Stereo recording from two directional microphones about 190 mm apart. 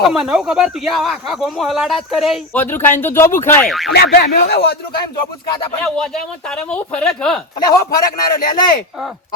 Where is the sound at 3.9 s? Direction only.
55° left (ahead or behind).